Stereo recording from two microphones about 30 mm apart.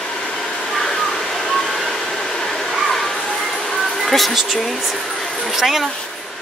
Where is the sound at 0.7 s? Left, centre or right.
Centre.